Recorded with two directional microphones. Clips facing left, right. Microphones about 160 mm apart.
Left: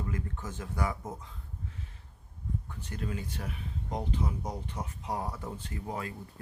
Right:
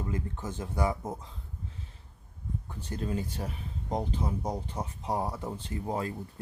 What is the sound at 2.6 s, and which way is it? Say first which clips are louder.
Speech: right 7 dB; 30° right (ahead or behind).